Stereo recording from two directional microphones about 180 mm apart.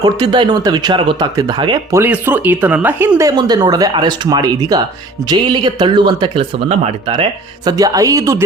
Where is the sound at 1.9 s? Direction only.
10° right (ahead or behind); by 7.2 s 30° right (ahead or behind).